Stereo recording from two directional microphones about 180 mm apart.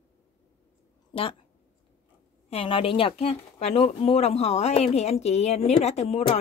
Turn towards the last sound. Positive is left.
turn(degrees=35)  # may be behind; listen again after turning